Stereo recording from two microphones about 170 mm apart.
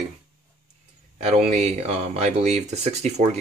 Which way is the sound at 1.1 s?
40° right (ahead or behind).